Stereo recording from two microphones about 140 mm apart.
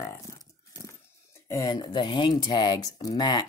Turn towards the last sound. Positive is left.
turn(degrees=30)  # may be behind; listen again after turning